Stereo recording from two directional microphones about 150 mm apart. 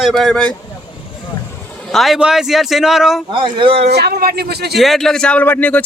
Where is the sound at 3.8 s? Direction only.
90° right.